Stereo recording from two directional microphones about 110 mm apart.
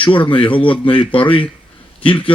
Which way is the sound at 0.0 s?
50° left (ahead or behind).